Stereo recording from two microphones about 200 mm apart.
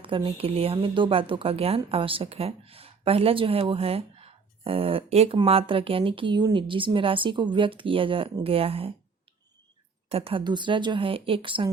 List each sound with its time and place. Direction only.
0.0 s speech: 25° right (ahead or behind)
10.1 s speech: 30° right (ahead or behind)